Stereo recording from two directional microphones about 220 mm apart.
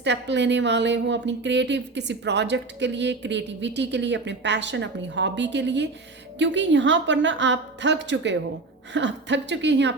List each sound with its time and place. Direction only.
0.0 s a woman's voice: 55° right (ahead or behind)